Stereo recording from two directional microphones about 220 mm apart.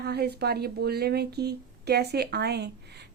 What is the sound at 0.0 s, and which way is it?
Speech, 45° right (ahead or behind).